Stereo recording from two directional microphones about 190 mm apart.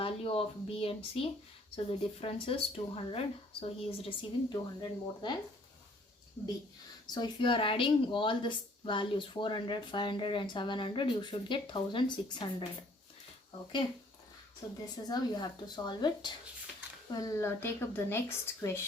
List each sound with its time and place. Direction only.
0.0 s speech: 30° left (ahead or behind)
7.1 s speech: 25° left (ahead or behind)
14.6 s speech: 20° left (ahead or behind)